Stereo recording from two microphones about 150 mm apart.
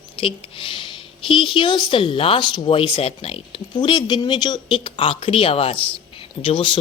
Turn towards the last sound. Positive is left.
turn(degrees=35)  # may be behind; listen again after turning